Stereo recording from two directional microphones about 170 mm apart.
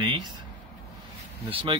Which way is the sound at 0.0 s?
30° right (ahead or behind).